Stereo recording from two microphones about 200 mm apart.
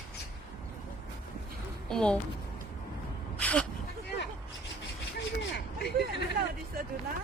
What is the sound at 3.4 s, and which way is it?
Gasp, 5° left (ahead or behind).